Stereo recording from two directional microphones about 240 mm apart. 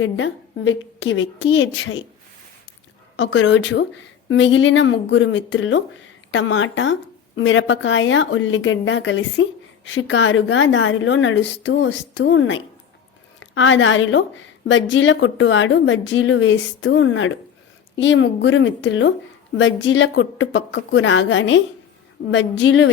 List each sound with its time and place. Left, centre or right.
0.0 s a woman's voice: left
3.2 s a woman's voice: left